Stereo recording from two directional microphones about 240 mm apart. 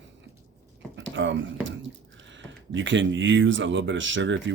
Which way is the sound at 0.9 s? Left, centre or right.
Right.